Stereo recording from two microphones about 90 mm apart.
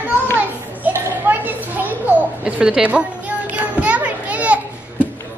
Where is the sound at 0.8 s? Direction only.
20° right (ahead or behind).